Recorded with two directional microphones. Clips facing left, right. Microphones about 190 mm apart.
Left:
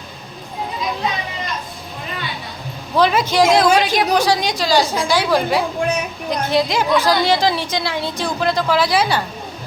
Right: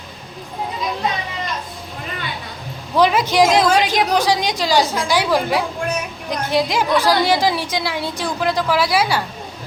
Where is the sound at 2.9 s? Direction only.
15° right (ahead or behind).